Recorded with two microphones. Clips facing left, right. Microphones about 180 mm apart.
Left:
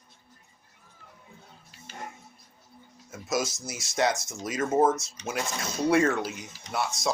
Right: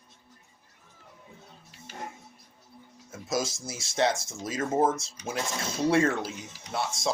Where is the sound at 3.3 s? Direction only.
25° right (ahead or behind).